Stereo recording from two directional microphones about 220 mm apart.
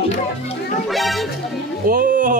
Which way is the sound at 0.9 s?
Centre (ahead or behind).